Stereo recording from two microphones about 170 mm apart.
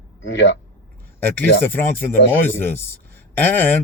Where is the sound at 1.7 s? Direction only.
15° left (ahead or behind).